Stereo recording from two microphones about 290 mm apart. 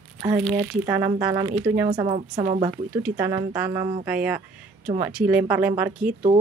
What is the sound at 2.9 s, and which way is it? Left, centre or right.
A woman's voice, centre.